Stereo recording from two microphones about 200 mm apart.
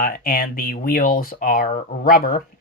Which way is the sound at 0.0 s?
45° left (ahead or behind).